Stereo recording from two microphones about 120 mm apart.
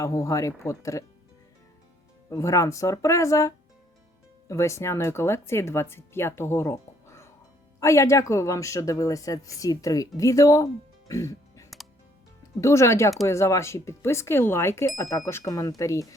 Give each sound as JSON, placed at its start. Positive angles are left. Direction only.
{"t": 0.0, "sound": "speech", "side_deg": 25}
{"t": 2.3, "sound": "speech", "side_deg": 25}
{"t": 11.1, "sound": "music", "side_deg": 25}
{"t": 12.5, "sound": "speech", "side_deg": 25}